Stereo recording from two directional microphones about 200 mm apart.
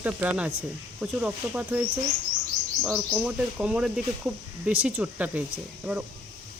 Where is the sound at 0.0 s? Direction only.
10° right (ahead or behind).